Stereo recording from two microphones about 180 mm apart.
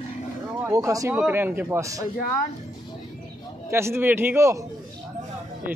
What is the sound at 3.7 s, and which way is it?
Speech, 15° right (ahead or behind).